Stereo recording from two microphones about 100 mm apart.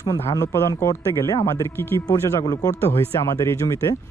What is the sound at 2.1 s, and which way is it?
Speech, 40° left (ahead or behind).